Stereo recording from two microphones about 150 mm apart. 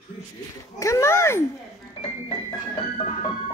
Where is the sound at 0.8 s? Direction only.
20° left (ahead or behind).